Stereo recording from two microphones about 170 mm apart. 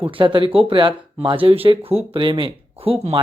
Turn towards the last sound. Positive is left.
turn(degrees=-35)  # may be behind; listen again after turning